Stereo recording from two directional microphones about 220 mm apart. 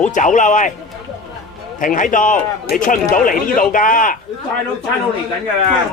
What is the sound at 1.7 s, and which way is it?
Speech, 35° left (ahead or behind).